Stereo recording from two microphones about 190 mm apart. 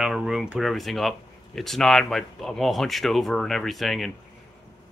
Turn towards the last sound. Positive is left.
turn(degrees=0)  # may be behind; listen again after turning